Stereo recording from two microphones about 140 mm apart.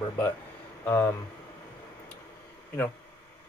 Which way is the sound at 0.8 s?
15° left (ahead or behind).